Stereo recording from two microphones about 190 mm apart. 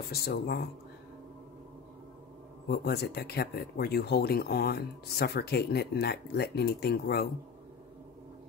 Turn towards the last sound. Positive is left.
turn(degrees=55)  # may be behind; listen again after turning